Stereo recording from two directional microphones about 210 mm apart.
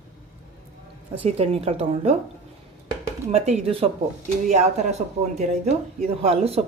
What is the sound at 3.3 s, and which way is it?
Speech, 30° right (ahead or behind).